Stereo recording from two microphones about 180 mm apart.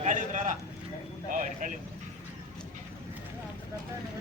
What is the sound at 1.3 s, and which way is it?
Speech, 45° right (ahead or behind).